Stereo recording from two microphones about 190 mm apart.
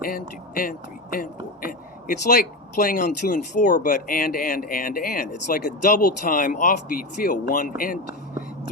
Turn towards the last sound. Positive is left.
turn(degrees=45)  # may be behind; listen again after turning